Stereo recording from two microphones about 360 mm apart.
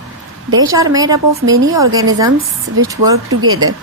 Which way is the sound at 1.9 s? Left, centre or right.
Right.